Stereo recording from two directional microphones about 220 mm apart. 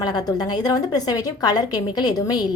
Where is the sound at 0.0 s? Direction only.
20° left (ahead or behind).